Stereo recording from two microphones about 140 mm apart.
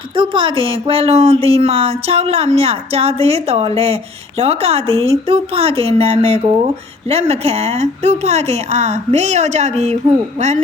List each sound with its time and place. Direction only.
0.2 s speech: 40° right (ahead or behind)